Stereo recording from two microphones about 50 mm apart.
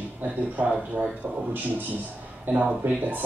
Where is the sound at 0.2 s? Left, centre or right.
Right.